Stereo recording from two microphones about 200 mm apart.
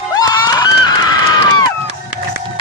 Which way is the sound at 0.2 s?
20° left (ahead or behind).